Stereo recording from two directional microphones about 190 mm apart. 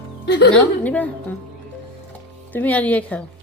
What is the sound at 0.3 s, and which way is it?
Speech, 65° left (ahead or behind).